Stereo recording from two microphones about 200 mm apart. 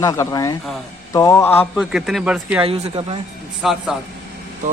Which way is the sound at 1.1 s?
15° left (ahead or behind).